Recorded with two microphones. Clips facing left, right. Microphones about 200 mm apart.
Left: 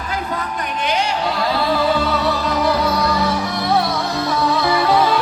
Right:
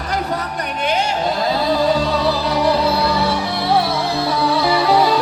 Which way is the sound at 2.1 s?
35° right (ahead or behind).